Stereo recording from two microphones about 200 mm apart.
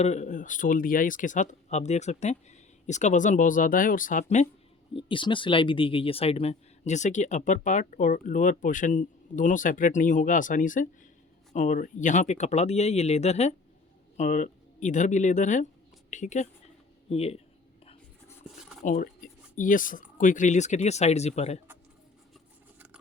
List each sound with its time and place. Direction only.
0.0 s speech: 35° left (ahead or behind)
4.9 s speech: 25° left (ahead or behind)
18.8 s speech: 40° left (ahead or behind)